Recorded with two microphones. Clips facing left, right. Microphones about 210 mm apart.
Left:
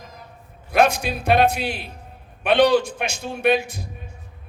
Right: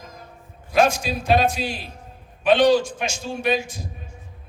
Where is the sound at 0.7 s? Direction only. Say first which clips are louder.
Left 1 dB; 60° left (ahead or behind).